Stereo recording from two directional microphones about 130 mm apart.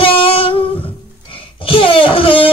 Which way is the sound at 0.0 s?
45° left (ahead or behind).